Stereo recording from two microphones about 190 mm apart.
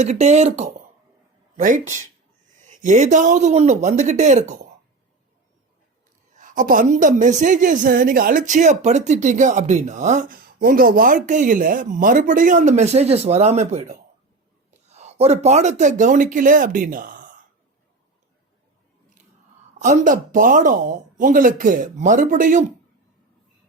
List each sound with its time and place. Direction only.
0.0 s speech: 35° right (ahead or behind)
6.3 s a woman's voice: 45° right (ahead or behind)
19.8 s a woman's voice: 40° right (ahead or behind)